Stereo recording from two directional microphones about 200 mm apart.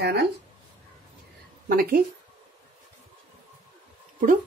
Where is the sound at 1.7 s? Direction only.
45° right (ahead or behind).